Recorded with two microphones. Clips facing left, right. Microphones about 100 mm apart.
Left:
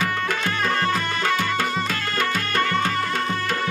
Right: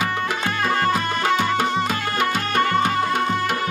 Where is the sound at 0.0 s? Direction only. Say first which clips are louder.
Right 1 dB; 15° right (ahead or behind).